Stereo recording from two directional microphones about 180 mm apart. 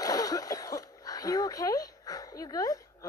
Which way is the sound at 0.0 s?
20° left (ahead or behind).